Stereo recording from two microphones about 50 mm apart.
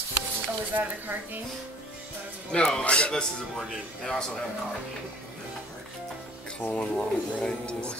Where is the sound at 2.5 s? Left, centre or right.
Centre.